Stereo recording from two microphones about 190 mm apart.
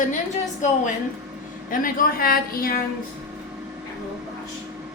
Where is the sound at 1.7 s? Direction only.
50° left (ahead or behind).